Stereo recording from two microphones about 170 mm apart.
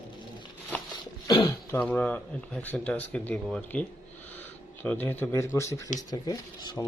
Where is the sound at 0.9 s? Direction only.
25° left (ahead or behind).